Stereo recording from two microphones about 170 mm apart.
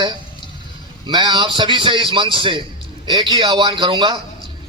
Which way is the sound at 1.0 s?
25° right (ahead or behind).